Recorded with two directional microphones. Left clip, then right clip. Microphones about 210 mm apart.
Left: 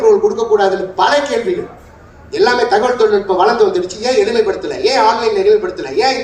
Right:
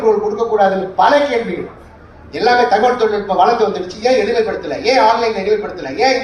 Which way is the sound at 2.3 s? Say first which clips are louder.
Even; 50° left (ahead or behind).